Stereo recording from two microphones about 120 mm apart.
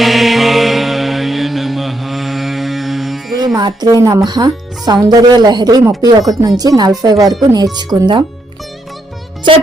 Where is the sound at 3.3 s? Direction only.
35° right (ahead or behind).